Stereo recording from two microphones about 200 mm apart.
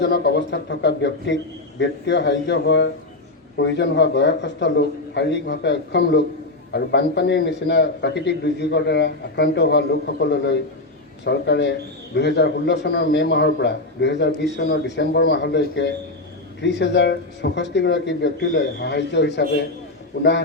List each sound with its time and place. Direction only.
0.0 s a man's voice: 60° left (ahead or behind)